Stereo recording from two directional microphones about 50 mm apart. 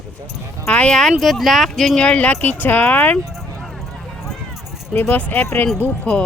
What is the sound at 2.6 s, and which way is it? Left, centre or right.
Speech, left.